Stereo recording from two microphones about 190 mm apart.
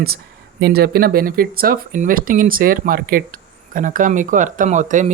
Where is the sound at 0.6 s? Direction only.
55° right (ahead or behind).